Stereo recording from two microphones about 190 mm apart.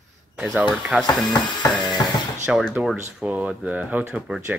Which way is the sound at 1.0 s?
20° left (ahead or behind).